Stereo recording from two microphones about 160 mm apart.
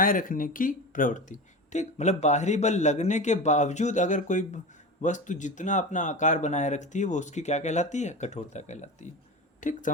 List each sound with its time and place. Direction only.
0.0 s speech: 60° left (ahead or behind)